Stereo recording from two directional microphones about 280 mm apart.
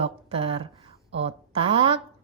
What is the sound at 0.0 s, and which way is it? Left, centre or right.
A woman's voice, right.